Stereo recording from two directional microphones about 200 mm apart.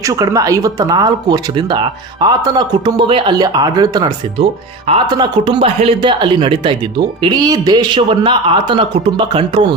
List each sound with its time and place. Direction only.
0.0 s speech: 15° right (ahead or behind)